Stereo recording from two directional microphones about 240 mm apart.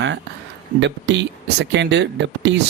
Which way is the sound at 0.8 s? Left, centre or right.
Right.